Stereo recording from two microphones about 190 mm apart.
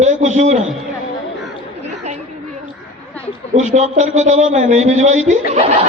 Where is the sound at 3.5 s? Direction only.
35° right (ahead or behind).